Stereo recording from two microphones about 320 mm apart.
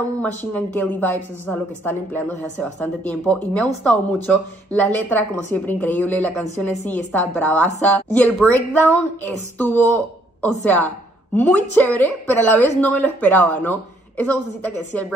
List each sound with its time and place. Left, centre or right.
0.5 s speech: centre